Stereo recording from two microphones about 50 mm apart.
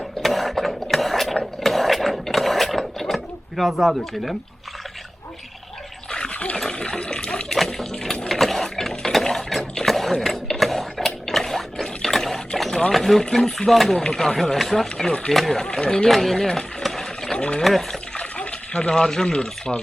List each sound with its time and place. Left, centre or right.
0.2 s a sound: centre
3.6 s speech: centre
6.1 s dog: centre
6.7 s water: centre
7.6 s water: centre
8.3 s a sound: centre
12.9 s speech: centre
15.6 s speech: centre
16.0 s a sound: centre
17.3 s speech: centre
17.6 s speech: centre
18.2 s speech: left